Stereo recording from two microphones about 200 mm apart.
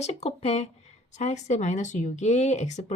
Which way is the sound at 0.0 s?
35° left (ahead or behind).